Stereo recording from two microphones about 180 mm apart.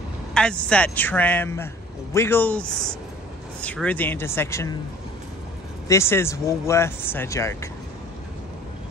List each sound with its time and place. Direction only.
0.3 s speech: 5° left (ahead or behind)
5.9 s speech: 15° left (ahead or behind)